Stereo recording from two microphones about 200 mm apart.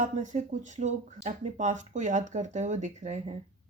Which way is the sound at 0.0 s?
40° right (ahead or behind).